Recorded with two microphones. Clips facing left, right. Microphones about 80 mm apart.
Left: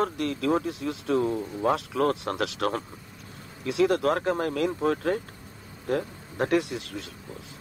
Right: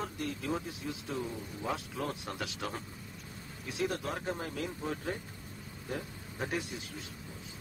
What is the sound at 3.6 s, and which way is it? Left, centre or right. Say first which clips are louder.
Speech: left 12 dB; left.